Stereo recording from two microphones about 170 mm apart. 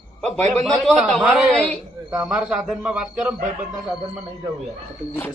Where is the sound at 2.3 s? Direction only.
5° right (ahead or behind).